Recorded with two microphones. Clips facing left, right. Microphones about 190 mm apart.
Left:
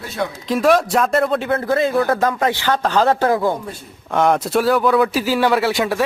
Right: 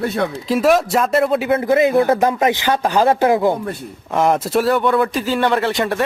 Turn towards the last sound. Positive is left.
turn(degrees=0)  # may be behind; listen again after turning